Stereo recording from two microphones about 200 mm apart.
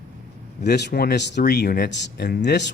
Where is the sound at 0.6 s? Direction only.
55° left (ahead or behind).